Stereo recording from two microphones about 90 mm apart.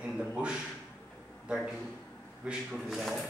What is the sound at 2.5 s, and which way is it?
Speech, centre (ahead or behind).